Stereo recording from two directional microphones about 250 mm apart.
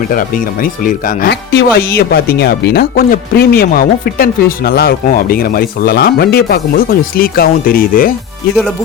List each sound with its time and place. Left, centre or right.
0.1 s speech: left